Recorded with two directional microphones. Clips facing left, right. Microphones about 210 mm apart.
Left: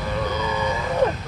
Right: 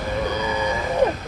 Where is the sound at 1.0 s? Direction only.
15° right (ahead or behind).